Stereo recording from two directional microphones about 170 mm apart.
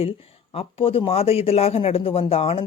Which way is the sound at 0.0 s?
35° left (ahead or behind).